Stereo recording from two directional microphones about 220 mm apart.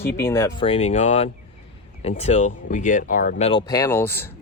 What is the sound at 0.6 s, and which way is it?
Speech, 25° left (ahead or behind).